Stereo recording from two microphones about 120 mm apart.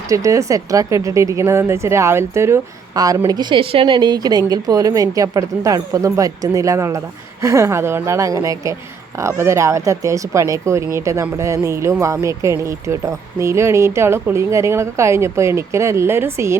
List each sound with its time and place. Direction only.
0.1 s speech: 25° right (ahead or behind)
3.5 s a woman's voice: 50° right (ahead or behind); by 16.6 s 20° right (ahead or behind)